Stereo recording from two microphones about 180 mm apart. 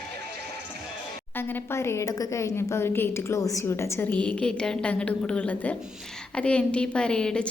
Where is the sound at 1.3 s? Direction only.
10° left (ahead or behind).